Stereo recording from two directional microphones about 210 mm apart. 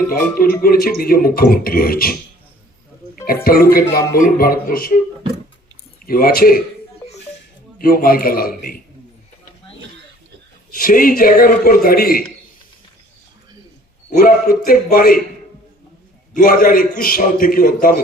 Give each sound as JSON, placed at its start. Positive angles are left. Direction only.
{"t": 0.1, "sound": "a man's voice", "side_deg": 45}
{"t": 3.4, "sound": "a man's voice", "side_deg": 45}
{"t": 6.1, "sound": "a man's voice", "side_deg": 45}
{"t": 7.8, "sound": "a man's voice", "side_deg": 40}
{"t": 10.8, "sound": "a man's voice", "side_deg": 40}
{"t": 14.1, "sound": "a man's voice", "side_deg": 45}
{"t": 16.3, "sound": "a man's voice", "side_deg": 40}